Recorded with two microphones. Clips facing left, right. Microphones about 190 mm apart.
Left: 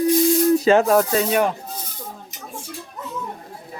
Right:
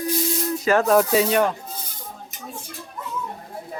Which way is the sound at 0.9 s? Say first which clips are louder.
Even; centre (ahead or behind).